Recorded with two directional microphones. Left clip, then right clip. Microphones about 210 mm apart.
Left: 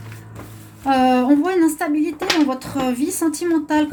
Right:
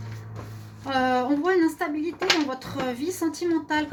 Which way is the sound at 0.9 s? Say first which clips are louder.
Left 8 dB; 45° left (ahead or behind).